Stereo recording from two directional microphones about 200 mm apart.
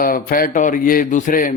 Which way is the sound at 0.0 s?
45° left (ahead or behind).